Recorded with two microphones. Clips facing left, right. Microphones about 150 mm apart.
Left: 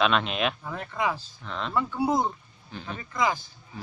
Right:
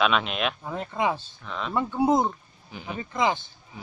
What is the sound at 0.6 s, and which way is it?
Speech, 20° right (ahead or behind).